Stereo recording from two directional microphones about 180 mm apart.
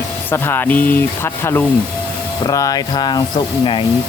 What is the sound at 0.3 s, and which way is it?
Speech, 10° left (ahead or behind).